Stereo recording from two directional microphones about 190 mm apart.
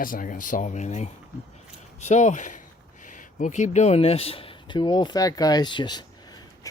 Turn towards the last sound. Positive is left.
turn(degrees=25)  # may be behind; listen again after turning